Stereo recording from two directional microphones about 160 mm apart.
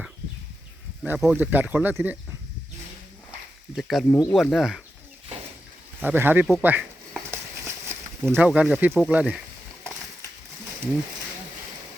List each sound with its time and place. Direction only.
1.0 s speech: 10° right (ahead or behind)
3.8 s speech: centre (ahead or behind)
6.0 s speech: 10° right (ahead or behind)
7.3 s a sound: 15° right (ahead or behind)
8.3 s speech: 10° right (ahead or behind)